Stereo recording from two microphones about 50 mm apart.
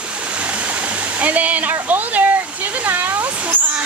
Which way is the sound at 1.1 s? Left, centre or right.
Right.